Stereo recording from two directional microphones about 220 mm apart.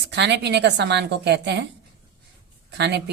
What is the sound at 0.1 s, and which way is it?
Speech, 50° right (ahead or behind).